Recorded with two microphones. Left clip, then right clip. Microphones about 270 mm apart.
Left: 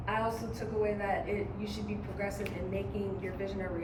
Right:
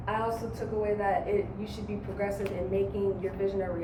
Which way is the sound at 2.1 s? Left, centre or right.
Centre.